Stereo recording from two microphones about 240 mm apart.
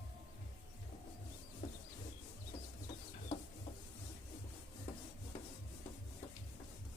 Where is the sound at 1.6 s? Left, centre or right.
Left.